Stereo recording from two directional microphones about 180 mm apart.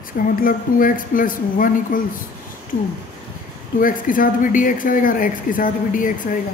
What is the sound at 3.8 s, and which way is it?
A man's voice, 50° left (ahead or behind).